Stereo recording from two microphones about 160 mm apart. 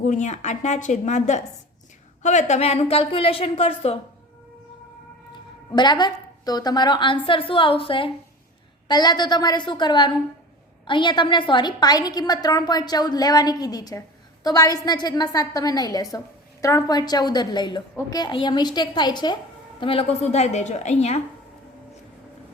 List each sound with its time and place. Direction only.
0.0 s a woman's voice: 50° left (ahead or behind)
5.7 s a woman's voice: 30° left (ahead or behind)